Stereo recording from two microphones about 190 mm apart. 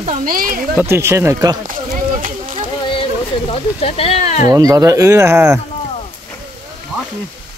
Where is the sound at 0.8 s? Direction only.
15° right (ahead or behind).